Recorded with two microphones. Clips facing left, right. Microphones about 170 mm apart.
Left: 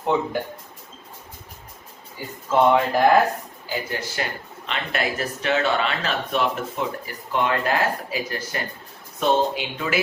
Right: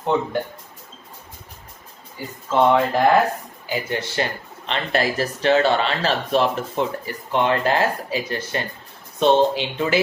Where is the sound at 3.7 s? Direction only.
25° right (ahead or behind).